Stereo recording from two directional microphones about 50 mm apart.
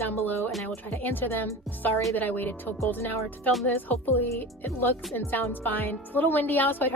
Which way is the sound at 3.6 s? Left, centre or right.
Left.